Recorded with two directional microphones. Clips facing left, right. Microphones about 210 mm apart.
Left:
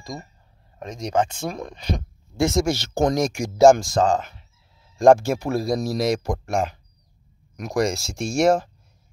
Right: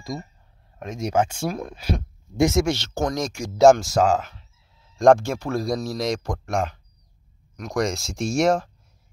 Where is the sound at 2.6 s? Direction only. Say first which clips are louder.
Left 1 dB; 5° left (ahead or behind).